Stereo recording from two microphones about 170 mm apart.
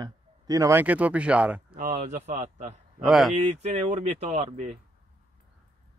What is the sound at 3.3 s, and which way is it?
Speech, 45° right (ahead or behind).